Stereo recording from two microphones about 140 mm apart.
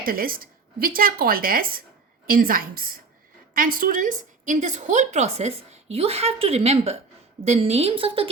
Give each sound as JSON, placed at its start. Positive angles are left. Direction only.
{"t": 0.0, "sound": "a woman's voice", "side_deg": -90}